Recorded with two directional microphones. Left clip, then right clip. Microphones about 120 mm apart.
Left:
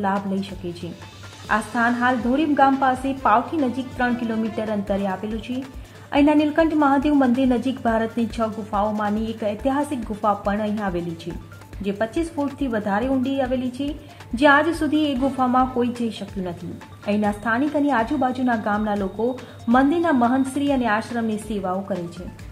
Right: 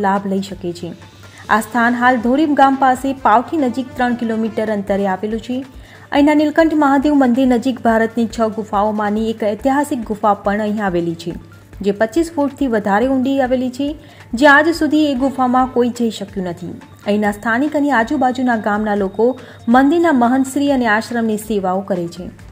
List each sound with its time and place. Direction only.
0.0 s a woman's voice: 35° right (ahead or behind)
1.5 s a woman's voice: 45° right (ahead or behind)